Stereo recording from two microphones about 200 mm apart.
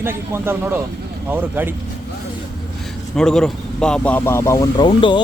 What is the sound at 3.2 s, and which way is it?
Speech, 5° left (ahead or behind).